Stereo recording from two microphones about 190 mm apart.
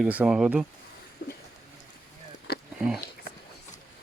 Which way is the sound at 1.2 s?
55° left (ahead or behind).